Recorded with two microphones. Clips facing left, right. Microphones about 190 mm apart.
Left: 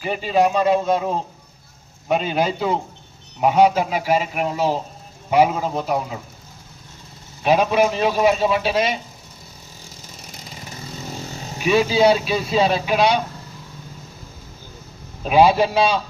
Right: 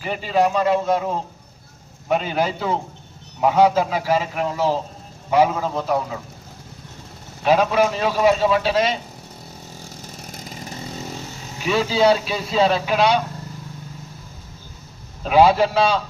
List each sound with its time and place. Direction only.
0.0 s a man's voice: 20° left (ahead or behind)
7.4 s a man's voice: 20° left (ahead or behind)
11.6 s a man's voice: 15° left (ahead or behind)
15.2 s a man's voice: 15° left (ahead or behind)